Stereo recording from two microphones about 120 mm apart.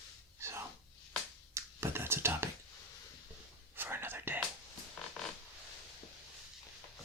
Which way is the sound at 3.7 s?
20° right (ahead or behind).